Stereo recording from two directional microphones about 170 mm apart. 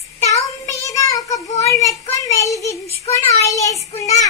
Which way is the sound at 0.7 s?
20° left (ahead or behind).